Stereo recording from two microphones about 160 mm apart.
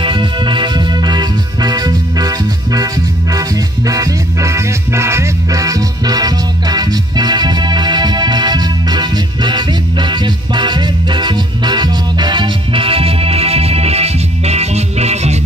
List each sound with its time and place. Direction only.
0.0 s music: 30° right (ahead or behind)